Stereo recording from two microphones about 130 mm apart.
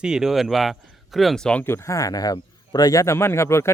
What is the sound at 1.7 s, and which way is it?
Speech, 20° left (ahead or behind).